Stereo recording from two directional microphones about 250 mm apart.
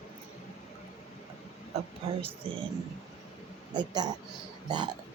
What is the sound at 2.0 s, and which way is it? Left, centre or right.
Speech, right.